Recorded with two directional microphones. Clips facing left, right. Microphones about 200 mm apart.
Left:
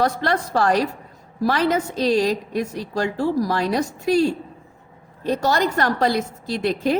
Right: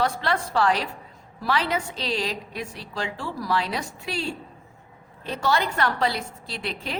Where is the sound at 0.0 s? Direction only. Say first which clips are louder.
Left 4 dB; 45° left (ahead or behind).